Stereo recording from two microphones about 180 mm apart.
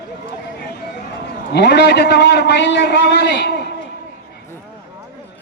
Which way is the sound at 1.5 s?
70° left (ahead or behind).